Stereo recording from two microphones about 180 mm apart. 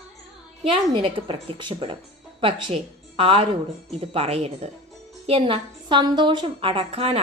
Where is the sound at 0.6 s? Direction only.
30° right (ahead or behind).